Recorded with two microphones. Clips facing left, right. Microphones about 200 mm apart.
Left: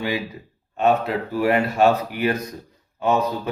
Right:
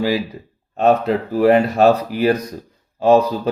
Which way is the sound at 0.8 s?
35° right (ahead or behind).